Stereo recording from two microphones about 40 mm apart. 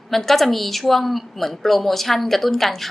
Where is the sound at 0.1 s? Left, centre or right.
Centre.